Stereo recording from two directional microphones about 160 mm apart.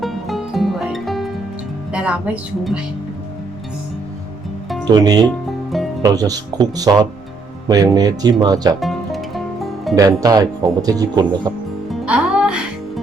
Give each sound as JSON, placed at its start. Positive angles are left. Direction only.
{"t": 0.0, "sound": "music", "side_deg": 0}
{"t": 1.9, "sound": "speech", "side_deg": -10}
{"t": 4.9, "sound": "speech", "side_deg": -25}
{"t": 8.8, "sound": "music", "side_deg": 0}
{"t": 9.9, "sound": "speech", "side_deg": -20}
{"t": 11.9, "sound": "music", "side_deg": -5}